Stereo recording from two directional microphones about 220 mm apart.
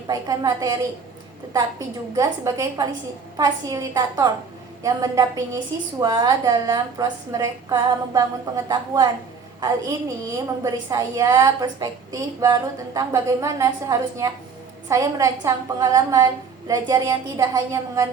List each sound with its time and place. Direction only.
0.1 s a woman's voice: 15° right (ahead or behind)
2.1 s a woman's voice: 15° right (ahead or behind)